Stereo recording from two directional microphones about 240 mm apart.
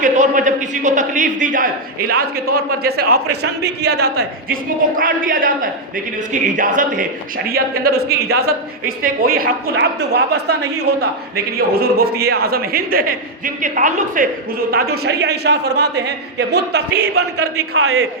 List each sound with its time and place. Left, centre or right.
0.0 s a man's voice: right
17.6 s a man's voice: right